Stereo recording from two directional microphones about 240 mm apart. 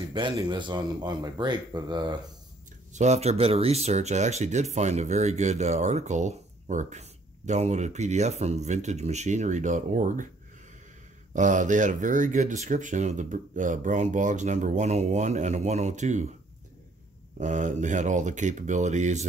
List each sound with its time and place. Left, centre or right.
0.1 s speech: centre
2.9 s speech: right
11.3 s speech: right
17.4 s speech: right